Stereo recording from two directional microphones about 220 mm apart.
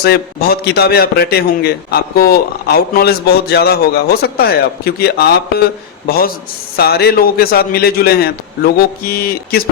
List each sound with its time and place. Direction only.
0.0 s a man's voice: 45° left (ahead or behind)